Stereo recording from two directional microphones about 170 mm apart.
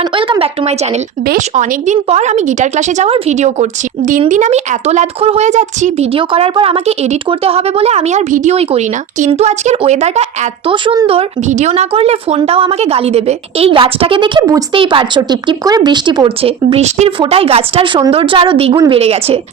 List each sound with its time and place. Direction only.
0.0 s speech: 30° right (ahead or behind)